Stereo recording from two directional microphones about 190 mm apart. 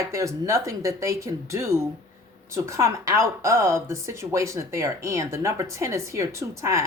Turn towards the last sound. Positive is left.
turn(degrees=-15)  # may be behind; listen again after turning